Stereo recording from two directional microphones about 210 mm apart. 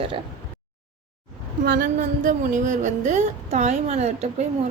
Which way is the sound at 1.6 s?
45° right (ahead or behind).